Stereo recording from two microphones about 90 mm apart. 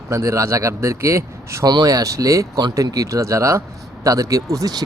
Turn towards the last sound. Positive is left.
turn(degrees=-45)  # may be behind; listen again after turning